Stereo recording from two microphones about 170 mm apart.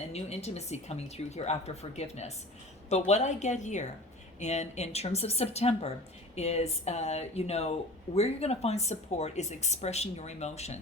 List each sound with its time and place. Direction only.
0.1 s a woman's voice: 40° left (ahead or behind)